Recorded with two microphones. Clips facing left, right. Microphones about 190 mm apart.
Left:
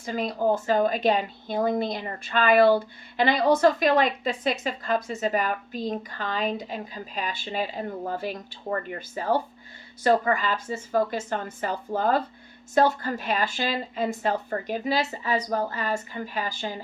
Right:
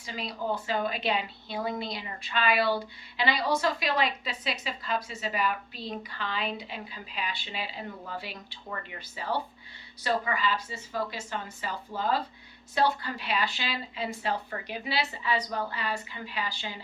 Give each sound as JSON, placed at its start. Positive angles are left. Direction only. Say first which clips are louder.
{"t": 0.0, "sound": "a woman's voice", "louder": "left 9 dB", "side_deg": 50}